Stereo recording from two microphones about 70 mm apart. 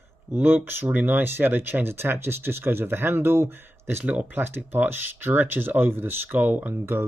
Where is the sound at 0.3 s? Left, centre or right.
Right.